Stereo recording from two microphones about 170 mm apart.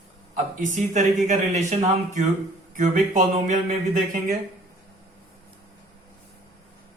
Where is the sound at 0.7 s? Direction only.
45° right (ahead or behind).